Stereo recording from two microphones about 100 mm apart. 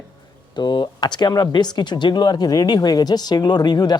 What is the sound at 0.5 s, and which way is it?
Speech, 45° left (ahead or behind).